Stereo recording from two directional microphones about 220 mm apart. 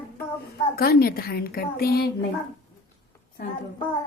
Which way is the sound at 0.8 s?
45° left (ahead or behind).